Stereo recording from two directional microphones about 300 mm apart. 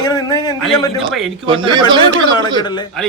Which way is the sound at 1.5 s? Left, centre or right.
Centre.